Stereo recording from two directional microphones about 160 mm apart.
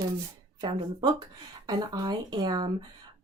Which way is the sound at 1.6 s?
25° right (ahead or behind).